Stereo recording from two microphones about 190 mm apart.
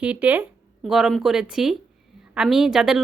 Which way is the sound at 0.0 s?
5° right (ahead or behind).